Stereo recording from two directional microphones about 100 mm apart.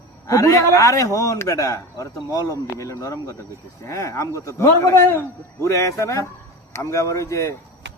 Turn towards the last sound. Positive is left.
turn(degrees=30)  # may be behind; listen again after turning